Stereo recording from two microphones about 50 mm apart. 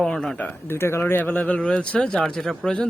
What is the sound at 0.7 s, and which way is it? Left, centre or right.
Speech, left.